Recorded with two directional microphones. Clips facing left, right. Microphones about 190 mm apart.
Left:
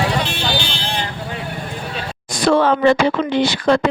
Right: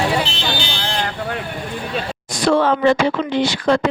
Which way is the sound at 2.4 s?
60° left (ahead or behind).